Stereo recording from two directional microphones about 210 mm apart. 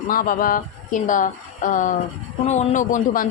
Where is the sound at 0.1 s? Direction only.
40° left (ahead or behind).